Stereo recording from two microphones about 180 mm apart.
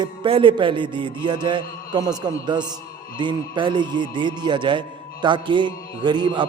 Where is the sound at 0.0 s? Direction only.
30° right (ahead or behind).